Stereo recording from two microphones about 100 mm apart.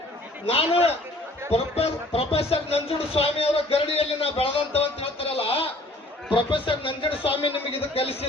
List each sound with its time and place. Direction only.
0.4 s a man's voice: 80° left
1.5 s speech: 90° left; by 5.7 s 70° left (ahead or behind)
6.3 s speech: 60° left (ahead or behind)
7.7 s speech: 75° left (ahead or behind)